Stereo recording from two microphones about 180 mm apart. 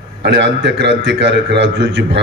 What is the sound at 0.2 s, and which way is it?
A man's voice, 75° right (ahead or behind).